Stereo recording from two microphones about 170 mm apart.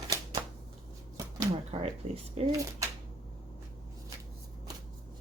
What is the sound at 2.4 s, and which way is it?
Speech, 40° right (ahead or behind).